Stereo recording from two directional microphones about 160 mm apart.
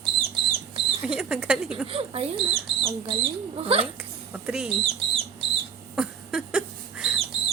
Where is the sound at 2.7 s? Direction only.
35° right (ahead or behind).